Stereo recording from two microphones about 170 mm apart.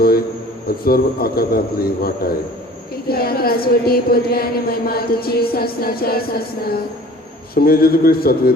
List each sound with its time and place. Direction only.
0.9 s a woman's voice: 60° left (ahead or behind)